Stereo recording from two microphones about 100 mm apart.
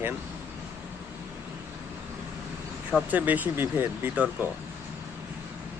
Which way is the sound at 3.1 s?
15° right (ahead or behind).